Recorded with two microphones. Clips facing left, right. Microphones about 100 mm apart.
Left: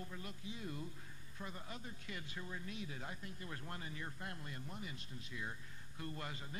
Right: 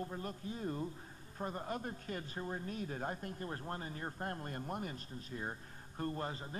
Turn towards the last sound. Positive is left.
turn(degrees=-35)  # may be behind; listen again after turning